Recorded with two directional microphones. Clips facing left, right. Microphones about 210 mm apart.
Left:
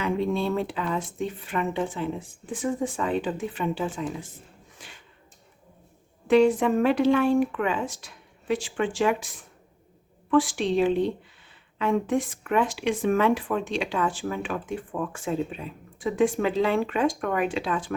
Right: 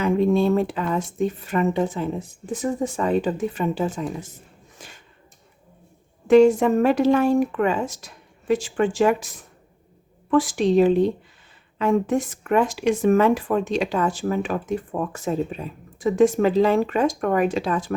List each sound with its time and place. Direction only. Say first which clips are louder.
0.0 s speech: right 7 dB; 45° right (ahead or behind)
4.8 s a sound: right 4 dB; 45° right (ahead or behind)
6.2 s speech: right 5 dB; 45° right (ahead or behind)